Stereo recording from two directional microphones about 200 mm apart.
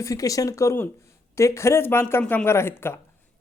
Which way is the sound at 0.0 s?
15° left (ahead or behind).